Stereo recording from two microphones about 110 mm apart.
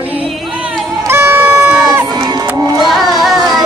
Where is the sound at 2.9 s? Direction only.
5° right (ahead or behind).